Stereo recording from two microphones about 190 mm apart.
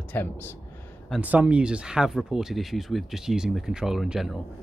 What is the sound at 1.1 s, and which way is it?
Speech, 10° right (ahead or behind).